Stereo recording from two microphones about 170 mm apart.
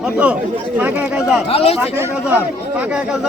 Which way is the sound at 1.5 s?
35° left (ahead or behind).